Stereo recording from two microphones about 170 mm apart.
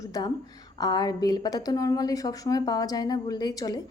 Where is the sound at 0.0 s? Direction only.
20° left (ahead or behind).